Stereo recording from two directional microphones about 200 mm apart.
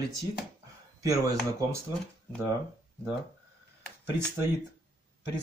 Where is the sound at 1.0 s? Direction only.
15° right (ahead or behind).